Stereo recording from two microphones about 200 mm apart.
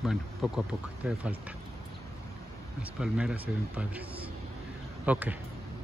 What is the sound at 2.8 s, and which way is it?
Speech, 5° right (ahead or behind).